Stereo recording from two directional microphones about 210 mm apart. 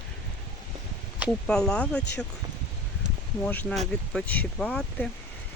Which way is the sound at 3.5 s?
10° left (ahead or behind).